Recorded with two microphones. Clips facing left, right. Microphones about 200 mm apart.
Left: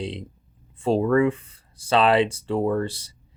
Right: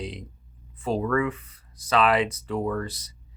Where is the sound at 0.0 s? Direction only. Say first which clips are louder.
Left 4 dB; 30° left (ahead or behind).